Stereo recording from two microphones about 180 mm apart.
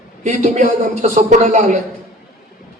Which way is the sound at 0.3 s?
40° right (ahead or behind).